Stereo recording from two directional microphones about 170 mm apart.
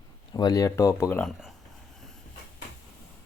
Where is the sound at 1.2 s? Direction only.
Centre (ahead or behind).